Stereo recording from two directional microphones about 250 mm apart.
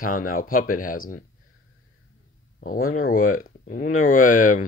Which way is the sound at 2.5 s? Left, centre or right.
Left.